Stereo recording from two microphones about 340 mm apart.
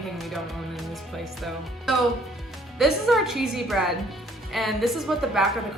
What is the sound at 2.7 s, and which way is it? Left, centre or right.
A woman's voice, centre.